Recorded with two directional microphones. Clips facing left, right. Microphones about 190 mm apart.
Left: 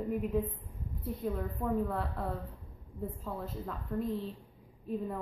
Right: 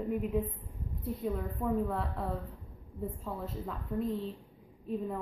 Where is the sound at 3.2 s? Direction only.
Centre (ahead or behind).